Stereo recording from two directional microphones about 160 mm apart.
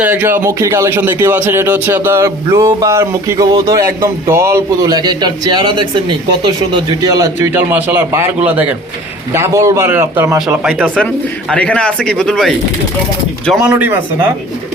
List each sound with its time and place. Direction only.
0.0 s a man's voice: 10° right (ahead or behind)
10.4 s speech: 5° right (ahead or behind)
13.6 s a man's voice: 10° right (ahead or behind)